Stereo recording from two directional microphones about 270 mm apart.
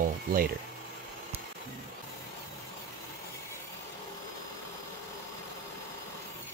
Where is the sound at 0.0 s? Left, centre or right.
Right.